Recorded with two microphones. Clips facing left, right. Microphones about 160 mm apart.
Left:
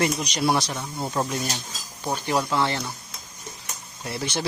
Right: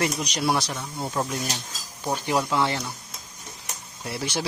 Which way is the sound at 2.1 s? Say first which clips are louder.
Even; 15° right (ahead or behind).